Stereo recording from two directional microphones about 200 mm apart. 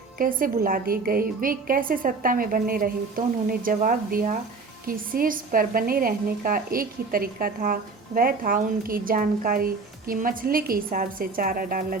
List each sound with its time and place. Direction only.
0.2 s a woman's voice: 45° right (ahead or behind)